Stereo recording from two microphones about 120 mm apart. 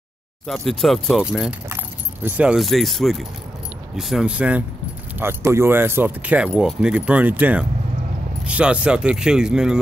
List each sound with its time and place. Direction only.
0.5 s speech: centre (ahead or behind)
5.2 s speech: 20° right (ahead or behind); by 9.8 s 5° right (ahead or behind)